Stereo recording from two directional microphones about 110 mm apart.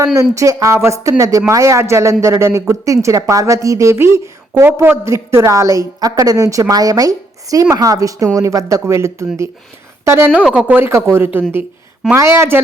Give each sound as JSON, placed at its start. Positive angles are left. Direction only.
{"t": 0.2, "sound": "a woman's voice", "side_deg": -30}
{"t": 10.3, "sound": "a woman's voice", "side_deg": -10}